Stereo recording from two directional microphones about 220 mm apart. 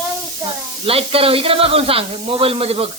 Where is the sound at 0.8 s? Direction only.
25° right (ahead or behind).